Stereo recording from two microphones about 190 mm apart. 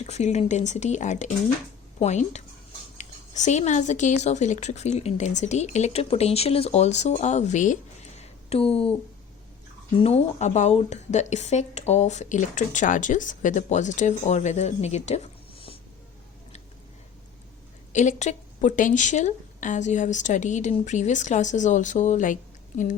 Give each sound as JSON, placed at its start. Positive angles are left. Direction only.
{"t": 0.0, "sound": "a woman's voice", "side_deg": 35}
{"t": 8.2, "sound": "a sound", "side_deg": 30}
{"t": 10.0, "sound": "a woman's voice", "side_deg": 35}
{"t": 17.9, "sound": "a woman's voice", "side_deg": 40}